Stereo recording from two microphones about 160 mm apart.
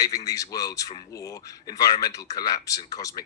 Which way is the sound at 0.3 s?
20° left (ahead or behind).